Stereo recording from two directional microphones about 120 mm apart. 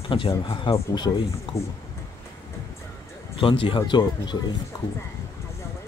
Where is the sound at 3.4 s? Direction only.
45° left (ahead or behind).